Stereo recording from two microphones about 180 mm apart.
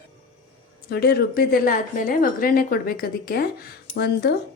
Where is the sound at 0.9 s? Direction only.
65° left (ahead or behind).